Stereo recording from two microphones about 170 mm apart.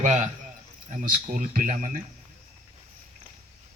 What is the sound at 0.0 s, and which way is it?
A man's voice, 45° right (ahead or behind).